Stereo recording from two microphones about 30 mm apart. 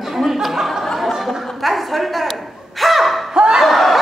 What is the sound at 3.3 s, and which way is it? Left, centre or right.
Snicker, right.